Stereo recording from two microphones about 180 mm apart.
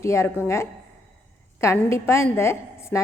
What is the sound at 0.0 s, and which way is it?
A woman's voice, 15° left (ahead or behind).